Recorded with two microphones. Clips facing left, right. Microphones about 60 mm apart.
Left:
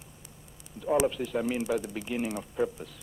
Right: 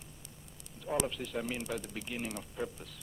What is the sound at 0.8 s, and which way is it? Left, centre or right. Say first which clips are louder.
Speech: left 8 dB; centre.